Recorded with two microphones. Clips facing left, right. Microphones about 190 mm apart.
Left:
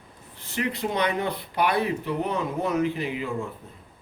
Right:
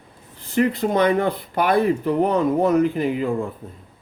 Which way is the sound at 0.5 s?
50° right (ahead or behind).